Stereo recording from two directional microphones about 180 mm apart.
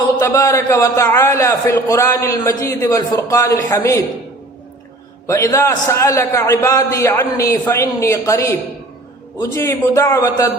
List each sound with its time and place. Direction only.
0.2 s a man's voice: 15° left (ahead or behind)
5.2 s a man's voice: 15° left (ahead or behind)